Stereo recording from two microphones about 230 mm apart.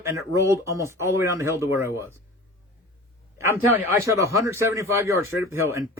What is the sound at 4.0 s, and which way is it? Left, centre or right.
Speech, centre.